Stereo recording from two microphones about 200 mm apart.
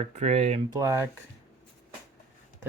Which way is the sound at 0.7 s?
15° right (ahead or behind).